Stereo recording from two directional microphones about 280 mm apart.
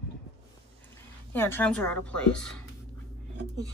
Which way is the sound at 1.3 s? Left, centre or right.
Centre.